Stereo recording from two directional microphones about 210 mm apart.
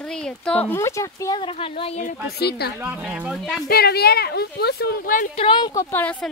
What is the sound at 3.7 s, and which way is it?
Speech, 50° left (ahead or behind).